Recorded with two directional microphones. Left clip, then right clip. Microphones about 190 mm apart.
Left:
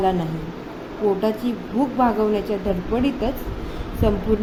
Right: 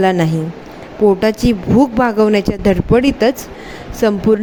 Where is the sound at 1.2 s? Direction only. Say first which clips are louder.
Right 8 dB; 60° right (ahead or behind).